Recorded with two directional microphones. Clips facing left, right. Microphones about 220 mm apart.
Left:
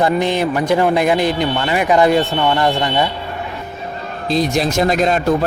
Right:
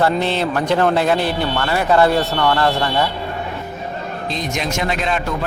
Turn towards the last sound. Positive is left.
turn(degrees=40)  # may be behind; listen again after turning